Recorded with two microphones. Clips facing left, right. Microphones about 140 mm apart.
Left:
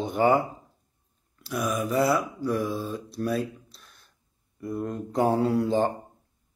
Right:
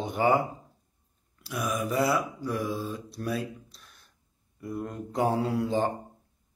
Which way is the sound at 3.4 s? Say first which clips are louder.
Left 4 dB; 35° left (ahead or behind).